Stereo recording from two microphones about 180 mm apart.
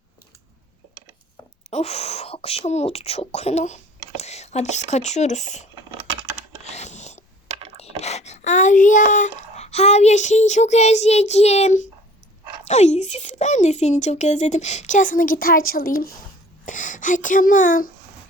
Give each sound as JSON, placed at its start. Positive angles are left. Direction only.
{"t": 1.7, "sound": "speech", "side_deg": 35}
{"t": 6.7, "sound": "a sound", "side_deg": 40}
{"t": 7.8, "sound": "speech", "side_deg": 35}
{"t": 16.6, "sound": "speech", "side_deg": 45}